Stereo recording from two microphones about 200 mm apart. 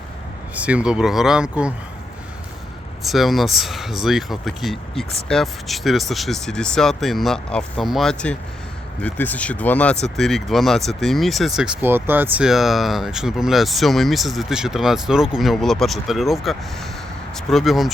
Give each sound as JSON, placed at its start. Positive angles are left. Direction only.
{"t": 0.5, "sound": "speech", "side_deg": -5}
{"t": 3.0, "sound": "speech", "side_deg": 0}